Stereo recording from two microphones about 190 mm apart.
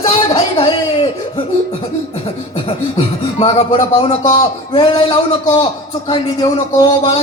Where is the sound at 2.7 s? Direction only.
25° left (ahead or behind).